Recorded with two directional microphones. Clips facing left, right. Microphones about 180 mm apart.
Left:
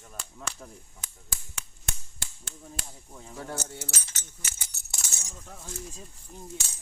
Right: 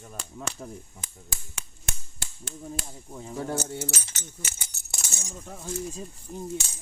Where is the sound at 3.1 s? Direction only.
25° right (ahead or behind).